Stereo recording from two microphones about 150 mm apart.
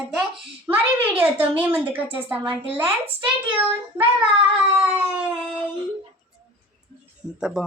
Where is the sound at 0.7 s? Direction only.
10° right (ahead or behind).